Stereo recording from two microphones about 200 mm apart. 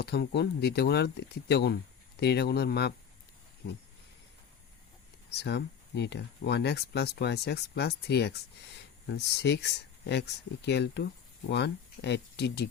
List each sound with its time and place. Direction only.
0.0 s speech: 55° left (ahead or behind)
5.3 s speech: 55° left (ahead or behind)